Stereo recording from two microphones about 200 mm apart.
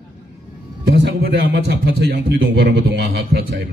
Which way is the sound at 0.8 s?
55° right (ahead or behind).